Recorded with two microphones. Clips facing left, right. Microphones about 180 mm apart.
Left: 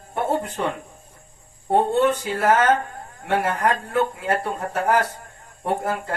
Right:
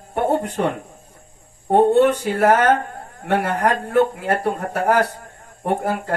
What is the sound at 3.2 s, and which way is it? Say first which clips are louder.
Speech: right 2 dB; 40° right (ahead or behind).